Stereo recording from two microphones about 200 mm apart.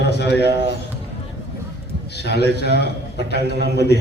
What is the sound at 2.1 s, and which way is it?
A man's voice, 55° left (ahead or behind).